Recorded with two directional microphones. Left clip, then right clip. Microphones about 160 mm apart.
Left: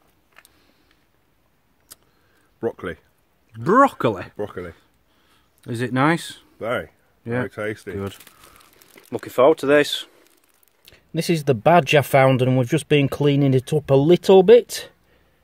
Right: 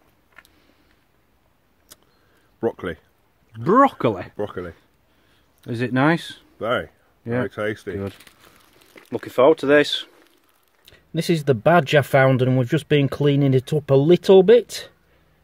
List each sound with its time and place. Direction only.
1.9 s a sound: centre (ahead or behind)
2.6 s speech: centre (ahead or behind)
8.0 s speech: 25° left (ahead or behind)
9.1 s speech: 5° left (ahead or behind)